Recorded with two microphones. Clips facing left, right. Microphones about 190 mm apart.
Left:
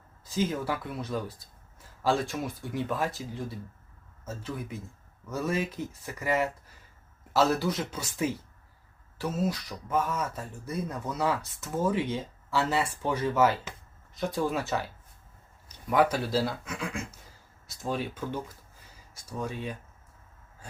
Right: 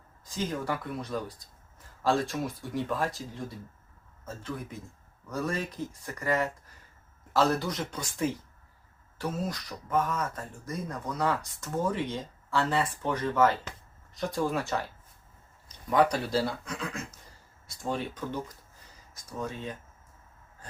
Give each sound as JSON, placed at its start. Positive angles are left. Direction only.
{"t": 0.3, "sound": "speech", "side_deg": 5}
{"t": 5.3, "sound": "speech", "side_deg": 5}